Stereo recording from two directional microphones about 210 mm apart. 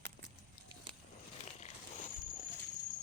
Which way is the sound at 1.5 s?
30° left (ahead or behind).